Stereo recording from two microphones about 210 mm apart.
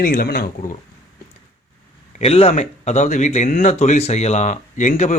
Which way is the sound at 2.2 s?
30° left (ahead or behind).